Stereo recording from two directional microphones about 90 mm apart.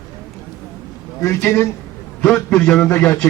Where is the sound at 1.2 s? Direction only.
30° left (ahead or behind).